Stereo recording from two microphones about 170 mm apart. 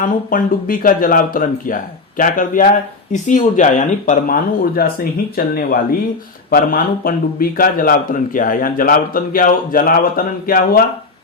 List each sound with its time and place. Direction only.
0.0 s a man's voice: 55° left (ahead or behind)